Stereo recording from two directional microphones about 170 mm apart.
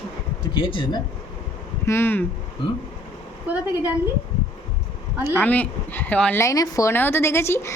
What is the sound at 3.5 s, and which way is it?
Speech, 10° right (ahead or behind).